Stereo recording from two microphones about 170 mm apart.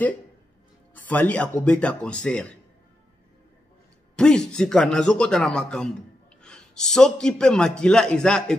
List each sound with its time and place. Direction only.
0.9 s speech: 10° left (ahead or behind)
4.2 s a man's voice: 5° left (ahead or behind)